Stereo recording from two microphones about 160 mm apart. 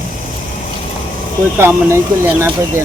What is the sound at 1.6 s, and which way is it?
Speech, 15° right (ahead or behind).